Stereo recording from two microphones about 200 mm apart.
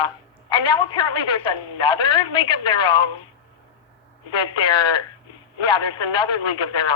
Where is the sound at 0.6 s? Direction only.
20° left (ahead or behind).